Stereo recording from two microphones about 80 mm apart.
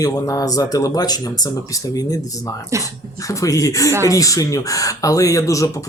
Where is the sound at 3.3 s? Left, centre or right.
Left.